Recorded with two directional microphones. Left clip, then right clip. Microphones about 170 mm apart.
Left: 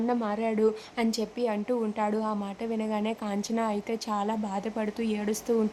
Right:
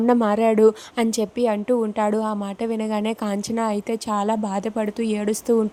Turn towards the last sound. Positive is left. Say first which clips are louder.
# right 7 dB
turn(degrees=-25)  # may be behind; listen again after turning